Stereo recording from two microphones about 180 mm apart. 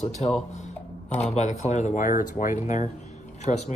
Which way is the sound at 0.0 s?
40° left (ahead or behind).